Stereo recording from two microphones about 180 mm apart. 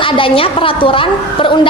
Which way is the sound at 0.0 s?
30° left (ahead or behind).